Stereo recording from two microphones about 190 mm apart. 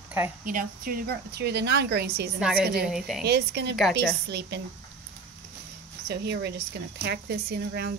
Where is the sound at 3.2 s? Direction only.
60° right (ahead or behind).